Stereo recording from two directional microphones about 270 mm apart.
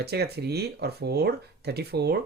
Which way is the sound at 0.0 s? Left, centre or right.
Right.